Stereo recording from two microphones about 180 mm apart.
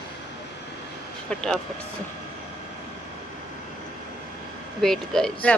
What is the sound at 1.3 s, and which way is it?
Speech, 5° left (ahead or behind).